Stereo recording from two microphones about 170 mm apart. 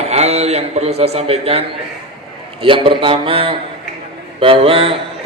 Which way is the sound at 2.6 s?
30° right (ahead or behind).